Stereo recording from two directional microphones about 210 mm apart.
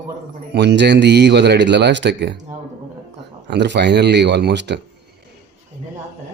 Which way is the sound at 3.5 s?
55° right (ahead or behind).